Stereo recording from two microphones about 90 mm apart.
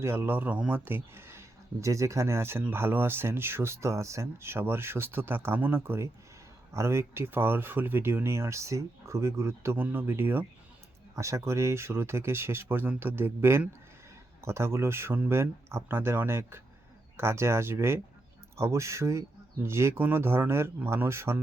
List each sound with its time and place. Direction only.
0.0 s speech: 25° right (ahead or behind)
11.1 s speech: 35° right (ahead or behind)